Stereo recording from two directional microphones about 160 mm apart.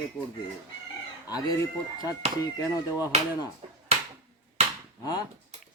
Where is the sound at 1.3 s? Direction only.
25° left (ahead or behind).